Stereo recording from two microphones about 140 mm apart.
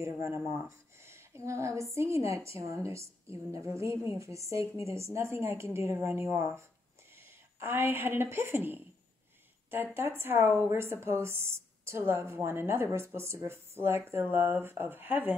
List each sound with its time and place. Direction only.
0.0 s a woman's voice: 20° right (ahead or behind)
7.6 s speech: 15° right (ahead or behind)